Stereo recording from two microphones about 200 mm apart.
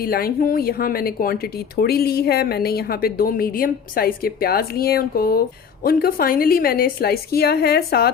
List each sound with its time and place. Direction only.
0.0 s speech: 50° left (ahead or behind)